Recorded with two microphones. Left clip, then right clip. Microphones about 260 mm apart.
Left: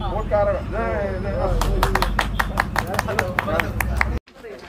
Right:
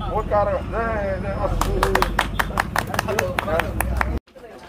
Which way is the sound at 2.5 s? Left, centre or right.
Right.